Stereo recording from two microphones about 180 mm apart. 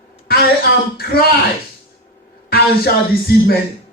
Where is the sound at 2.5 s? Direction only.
60° left (ahead or behind).